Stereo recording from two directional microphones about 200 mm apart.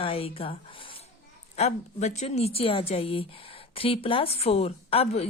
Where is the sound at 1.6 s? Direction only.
35° left (ahead or behind).